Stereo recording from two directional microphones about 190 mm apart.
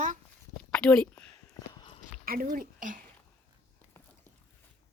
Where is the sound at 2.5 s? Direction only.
45° right (ahead or behind).